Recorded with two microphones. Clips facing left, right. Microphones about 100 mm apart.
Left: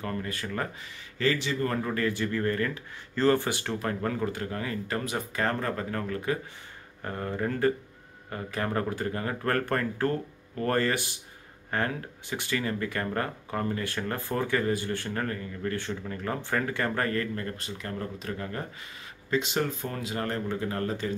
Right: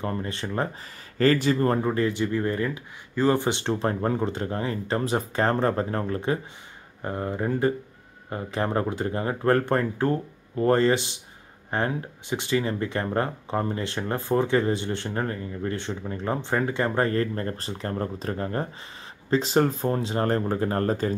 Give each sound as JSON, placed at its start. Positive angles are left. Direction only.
{"t": 0.0, "sound": "speech", "side_deg": -25}
{"t": 1.1, "sound": "speech", "side_deg": -45}
{"t": 7.0, "sound": "speech", "side_deg": -20}